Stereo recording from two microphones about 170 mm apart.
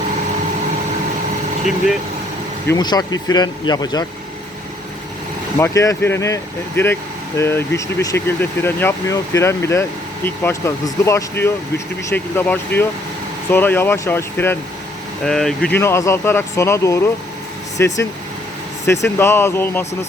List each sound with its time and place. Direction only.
2.6 s speech: 25° left (ahead or behind)
5.5 s speech: 15° left (ahead or behind)